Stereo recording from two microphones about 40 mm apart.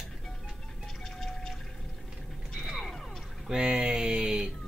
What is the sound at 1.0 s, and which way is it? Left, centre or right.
Music, centre.